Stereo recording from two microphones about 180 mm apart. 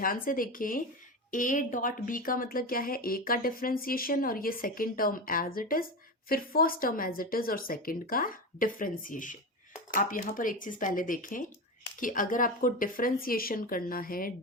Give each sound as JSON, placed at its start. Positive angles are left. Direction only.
{"t": 0.0, "sound": "speech", "side_deg": 50}